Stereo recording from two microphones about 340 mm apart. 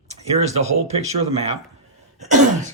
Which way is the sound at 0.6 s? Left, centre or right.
Centre.